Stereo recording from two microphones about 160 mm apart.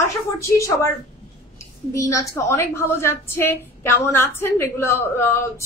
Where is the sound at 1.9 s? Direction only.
20° left (ahead or behind).